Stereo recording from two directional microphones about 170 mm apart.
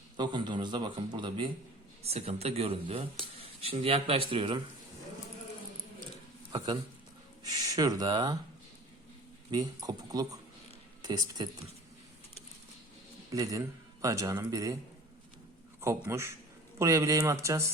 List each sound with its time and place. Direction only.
0.2 s a man's voice: 25° right (ahead or behind)
2.0 s speech: 40° right (ahead or behind)
7.4 s speech: 20° right (ahead or behind)
9.5 s a man's voice: 20° right (ahead or behind)
13.3 s a man's voice: 20° right (ahead or behind)
15.8 s a man's voice: 15° right (ahead or behind)